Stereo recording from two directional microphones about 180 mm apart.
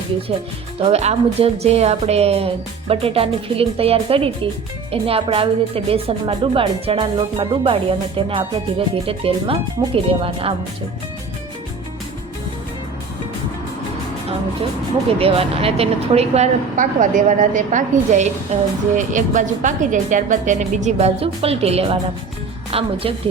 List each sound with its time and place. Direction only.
0.8 s speech: 35° right (ahead or behind)
15.2 s a woman's voice: 30° right (ahead or behind)